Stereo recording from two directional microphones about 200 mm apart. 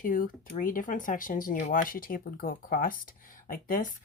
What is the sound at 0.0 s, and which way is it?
Speech, 45° left (ahead or behind).